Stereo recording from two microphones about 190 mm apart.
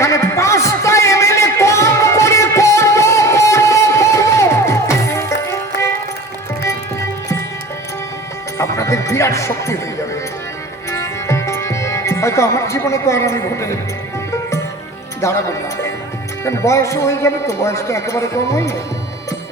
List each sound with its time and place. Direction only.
0.0 s a sound: 15° left (ahead or behind)
6.6 s music: 15° left (ahead or behind)
8.5 s music: 15° left (ahead or behind)
10.9 s music: 15° left (ahead or behind)
15.2 s a man's voice: 15° left (ahead or behind)